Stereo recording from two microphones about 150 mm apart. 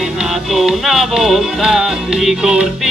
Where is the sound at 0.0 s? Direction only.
5° right (ahead or behind).